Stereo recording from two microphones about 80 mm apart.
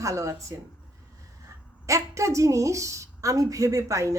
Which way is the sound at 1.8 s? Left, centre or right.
Right.